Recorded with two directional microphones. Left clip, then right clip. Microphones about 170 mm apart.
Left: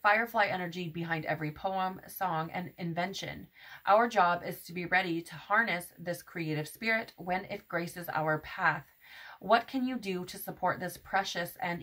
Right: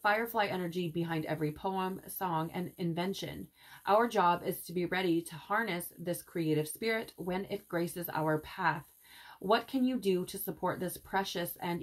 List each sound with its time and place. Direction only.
0.0 s speech: 45° left (ahead or behind)